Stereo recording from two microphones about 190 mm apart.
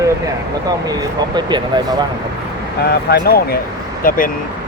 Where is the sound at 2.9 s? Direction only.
55° left (ahead or behind).